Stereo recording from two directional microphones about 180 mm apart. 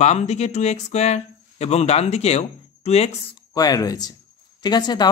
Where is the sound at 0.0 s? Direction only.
40° left (ahead or behind).